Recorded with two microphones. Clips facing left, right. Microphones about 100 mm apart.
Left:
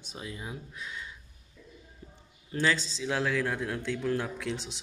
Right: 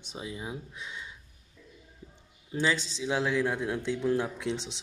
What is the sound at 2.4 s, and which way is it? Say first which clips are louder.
A man's voice: even; 15° right (ahead or behind).